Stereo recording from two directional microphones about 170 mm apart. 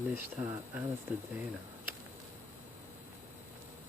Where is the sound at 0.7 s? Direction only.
10° right (ahead or behind).